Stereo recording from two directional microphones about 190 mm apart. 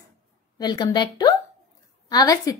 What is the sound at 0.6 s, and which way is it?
A woman's voice, 20° left (ahead or behind).